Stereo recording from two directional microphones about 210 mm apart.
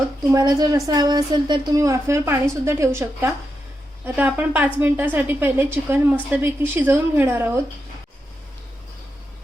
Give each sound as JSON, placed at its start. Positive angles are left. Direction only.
{"t": 0.3, "sound": "a woman's voice", "side_deg": -15}